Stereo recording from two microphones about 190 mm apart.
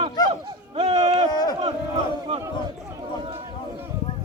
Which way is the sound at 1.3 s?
20° left (ahead or behind).